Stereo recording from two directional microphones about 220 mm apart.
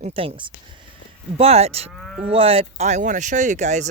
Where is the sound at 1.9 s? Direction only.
Centre (ahead or behind).